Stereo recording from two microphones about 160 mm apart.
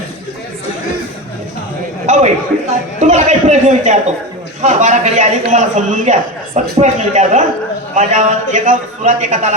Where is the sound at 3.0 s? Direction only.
45° right (ahead or behind).